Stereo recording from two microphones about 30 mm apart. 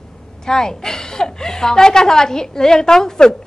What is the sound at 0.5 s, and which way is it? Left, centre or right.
Speech, left.